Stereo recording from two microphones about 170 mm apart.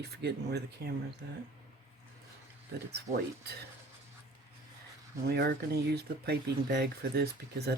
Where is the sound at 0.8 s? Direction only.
65° right (ahead or behind).